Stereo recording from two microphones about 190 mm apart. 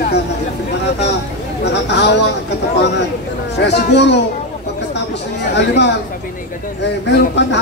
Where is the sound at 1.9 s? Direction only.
65° left (ahead or behind).